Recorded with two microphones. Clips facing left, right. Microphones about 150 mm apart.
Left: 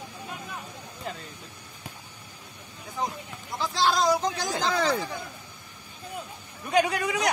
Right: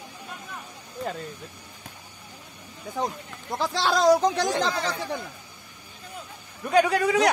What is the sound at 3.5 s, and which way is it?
Speech, 70° right (ahead or behind).